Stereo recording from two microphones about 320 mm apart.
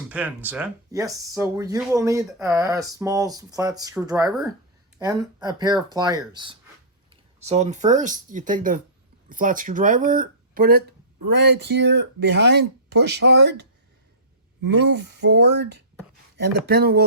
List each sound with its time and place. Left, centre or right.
0.1 s speech: centre; by 13.7 s right
15.1 s speech: right